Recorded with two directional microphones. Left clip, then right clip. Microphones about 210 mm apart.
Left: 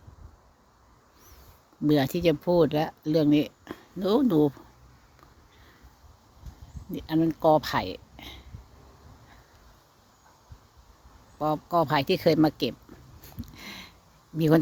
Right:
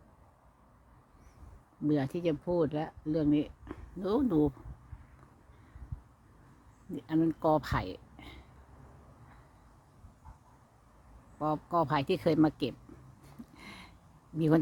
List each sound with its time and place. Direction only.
1.9 s speech: 20° left (ahead or behind)
6.9 s speech: 10° left (ahead or behind)
11.3 s speech: 5° left (ahead or behind)
13.6 s a sound: 10° left (ahead or behind)
14.3 s speech: 10° left (ahead or behind)